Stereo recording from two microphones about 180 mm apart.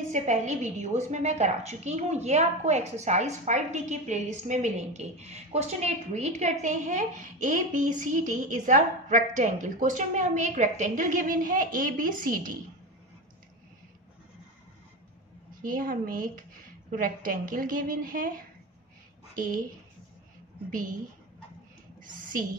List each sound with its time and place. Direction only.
0.1 s a woman's voice: 40° right (ahead or behind)
15.6 s a woman's voice: 50° right (ahead or behind)
19.3 s speech: 50° right (ahead or behind)